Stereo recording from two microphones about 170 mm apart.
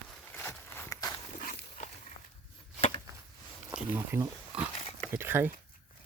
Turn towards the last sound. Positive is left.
turn(degrees=-10)  # may be behind; listen again after turning